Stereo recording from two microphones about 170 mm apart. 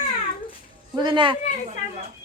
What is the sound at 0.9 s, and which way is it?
Speech, 25° right (ahead or behind).